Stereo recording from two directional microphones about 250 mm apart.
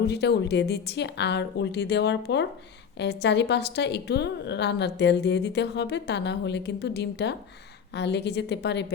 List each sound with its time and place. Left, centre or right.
0.0 s a woman's voice: left